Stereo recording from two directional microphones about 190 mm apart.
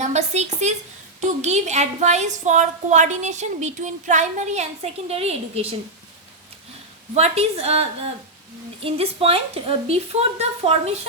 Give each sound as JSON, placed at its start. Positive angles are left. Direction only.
{"t": 0.0, "sound": "a woman's voice", "side_deg": -35}
{"t": 7.1, "sound": "a woman's voice", "side_deg": -35}